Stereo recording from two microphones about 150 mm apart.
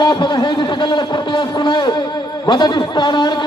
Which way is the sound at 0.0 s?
30° left (ahead or behind).